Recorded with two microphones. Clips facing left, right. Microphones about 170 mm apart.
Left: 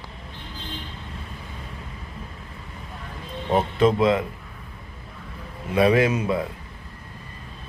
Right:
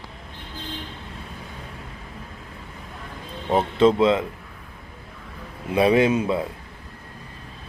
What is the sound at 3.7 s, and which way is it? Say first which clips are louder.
Speech: right 3 dB; 25° right (ahead or behind).